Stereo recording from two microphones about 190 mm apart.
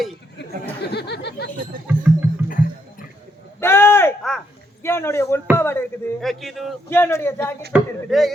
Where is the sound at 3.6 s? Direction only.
10° left (ahead or behind).